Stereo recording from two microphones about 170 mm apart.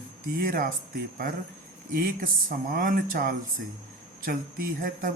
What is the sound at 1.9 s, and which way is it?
Speech, 55° right (ahead or behind).